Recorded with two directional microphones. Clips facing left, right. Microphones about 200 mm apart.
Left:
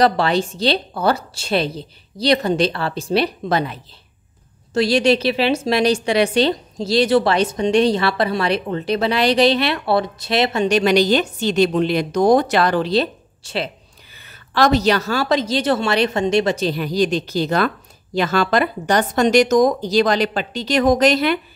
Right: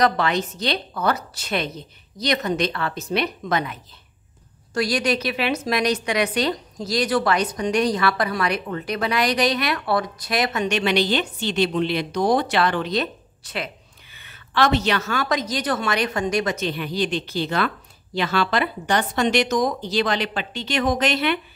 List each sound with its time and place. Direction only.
0.0 s a woman's voice: 30° left (ahead or behind)